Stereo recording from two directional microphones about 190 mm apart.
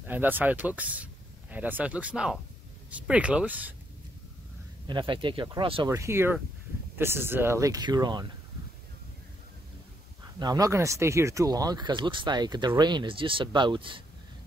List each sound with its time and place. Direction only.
0.0 s speech: 10° right (ahead or behind)
4.8 s speech: 25° right (ahead or behind)
5.9 s speech: 15° right (ahead or behind)
10.4 s speech: 20° right (ahead or behind)